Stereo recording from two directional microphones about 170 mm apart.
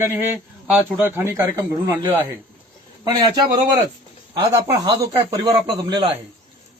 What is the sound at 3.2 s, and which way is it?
A man's voice, 25° right (ahead or behind).